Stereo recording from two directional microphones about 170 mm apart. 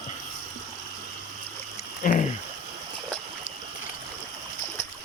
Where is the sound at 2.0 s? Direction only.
50° left (ahead or behind).